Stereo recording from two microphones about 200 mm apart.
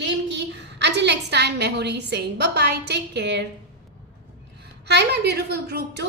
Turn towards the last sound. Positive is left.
turn(degrees=-55)  # may be behind; listen again after turning